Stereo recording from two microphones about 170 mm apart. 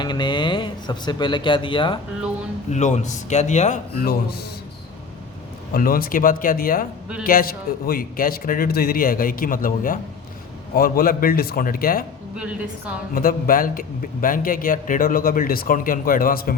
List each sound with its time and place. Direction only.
0.0 s speech: 25° left (ahead or behind)
2.6 s a man's voice: 40° left (ahead or behind)
5.7 s a man's voice: 60° left (ahead or behind)
13.1 s a man's voice: 55° left (ahead or behind)